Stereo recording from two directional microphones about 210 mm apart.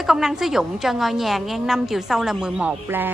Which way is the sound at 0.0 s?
Centre (ahead or behind).